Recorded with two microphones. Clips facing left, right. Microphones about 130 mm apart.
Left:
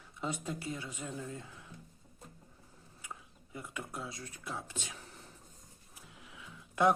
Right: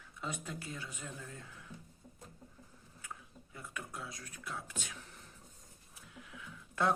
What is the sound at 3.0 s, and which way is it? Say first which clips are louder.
Speech: left 1 dB; 20° left (ahead or behind).